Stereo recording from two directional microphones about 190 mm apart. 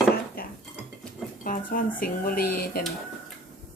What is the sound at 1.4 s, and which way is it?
Speech, 45° left (ahead or behind).